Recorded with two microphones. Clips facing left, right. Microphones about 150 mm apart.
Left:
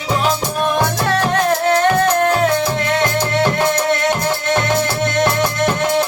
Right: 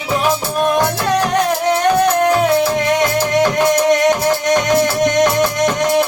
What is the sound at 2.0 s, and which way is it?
Music, 15° right (ahead or behind).